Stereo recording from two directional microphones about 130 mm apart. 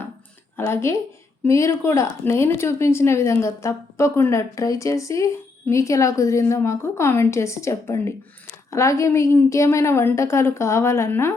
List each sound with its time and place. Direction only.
0.5 s speech: 20° left (ahead or behind)